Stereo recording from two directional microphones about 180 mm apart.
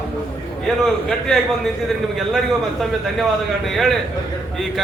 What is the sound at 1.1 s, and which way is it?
A man's voice, centre (ahead or behind).